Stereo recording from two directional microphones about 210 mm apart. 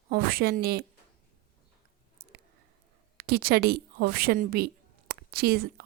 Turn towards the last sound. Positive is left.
turn(degrees=-45)  # may be behind; listen again after turning